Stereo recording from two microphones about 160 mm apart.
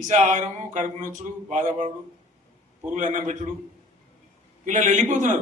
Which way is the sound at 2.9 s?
50° right (ahead or behind).